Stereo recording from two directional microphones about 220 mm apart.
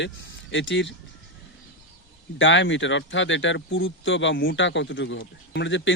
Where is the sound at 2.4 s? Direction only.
55° left (ahead or behind).